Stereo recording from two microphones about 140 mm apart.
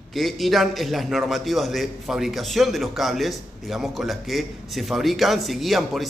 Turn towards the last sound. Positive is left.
turn(degrees=0)  # may be behind; listen again after turning